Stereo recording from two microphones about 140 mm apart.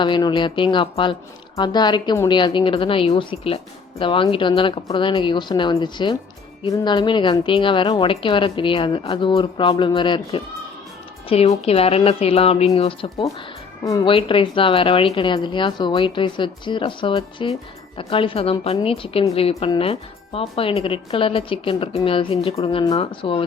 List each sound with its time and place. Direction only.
0.0 s speech: 35° left (ahead or behind)
11.3 s a woman's voice: 45° left (ahead or behind)